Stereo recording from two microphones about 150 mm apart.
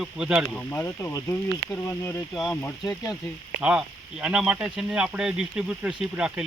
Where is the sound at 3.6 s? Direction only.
5° right (ahead or behind).